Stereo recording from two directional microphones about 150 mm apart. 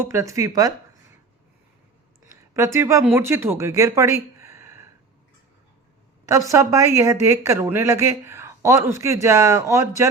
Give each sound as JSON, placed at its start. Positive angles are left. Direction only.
{"t": 0.0, "sound": "speech", "side_deg": -20}
{"t": 2.2, "sound": "a sound", "side_deg": -20}
{"t": 3.0, "sound": "speech", "side_deg": -15}
{"t": 6.2, "sound": "speech", "side_deg": -20}